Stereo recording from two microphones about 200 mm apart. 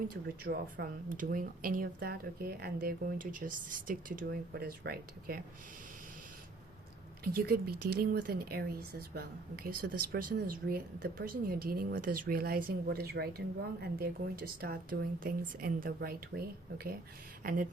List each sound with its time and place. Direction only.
0.1 s speech: 45° right (ahead or behind)
7.3 s speech: 50° right (ahead or behind)